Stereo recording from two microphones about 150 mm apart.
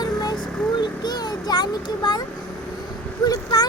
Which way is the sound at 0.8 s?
30° left (ahead or behind).